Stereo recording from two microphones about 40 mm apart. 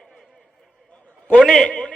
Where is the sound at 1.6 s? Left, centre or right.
Left.